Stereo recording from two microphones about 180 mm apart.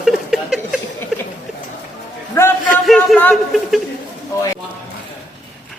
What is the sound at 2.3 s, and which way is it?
A man's voice, 15° left (ahead or behind).